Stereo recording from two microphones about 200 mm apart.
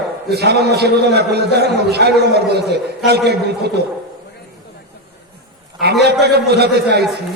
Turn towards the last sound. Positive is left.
turn(degrees=-55)  # may be behind; listen again after turning